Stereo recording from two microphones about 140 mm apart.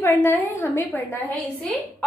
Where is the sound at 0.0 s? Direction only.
15° left (ahead or behind).